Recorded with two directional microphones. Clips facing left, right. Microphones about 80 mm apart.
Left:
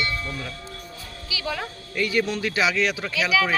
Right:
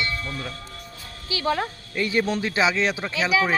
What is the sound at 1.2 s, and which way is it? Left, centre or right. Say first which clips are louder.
Speech: right 6 dB; right.